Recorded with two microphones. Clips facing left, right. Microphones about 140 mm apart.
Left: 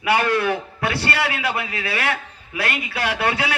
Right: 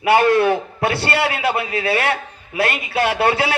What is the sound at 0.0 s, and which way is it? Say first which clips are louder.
A man's voice: right 6 dB; 25° right (ahead or behind).